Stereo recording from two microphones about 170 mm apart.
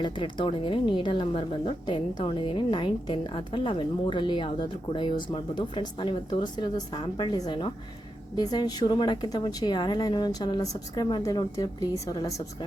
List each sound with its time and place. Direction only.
0.0 s a woman's voice: 30° left (ahead or behind)